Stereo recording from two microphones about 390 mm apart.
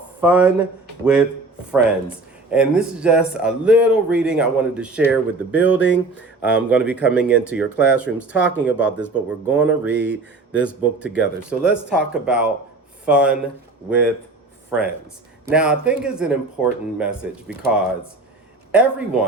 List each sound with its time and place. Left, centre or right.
0.2 s speech: centre
5.8 s speech: left
6.4 s speech: centre
14.7 s speech: centre